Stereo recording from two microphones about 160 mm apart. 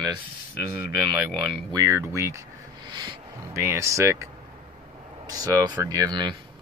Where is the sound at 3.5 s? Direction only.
15° right (ahead or behind).